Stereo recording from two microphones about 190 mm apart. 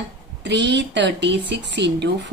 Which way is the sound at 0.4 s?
65° right (ahead or behind).